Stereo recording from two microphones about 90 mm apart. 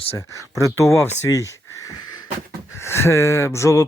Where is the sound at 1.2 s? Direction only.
35° left (ahead or behind).